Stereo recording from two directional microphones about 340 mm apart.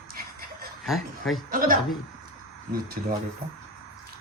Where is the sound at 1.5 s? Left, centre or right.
Right.